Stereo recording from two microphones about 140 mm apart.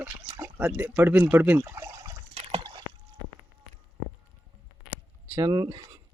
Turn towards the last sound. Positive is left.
turn(degrees=-25)  # may be behind; listen again after turning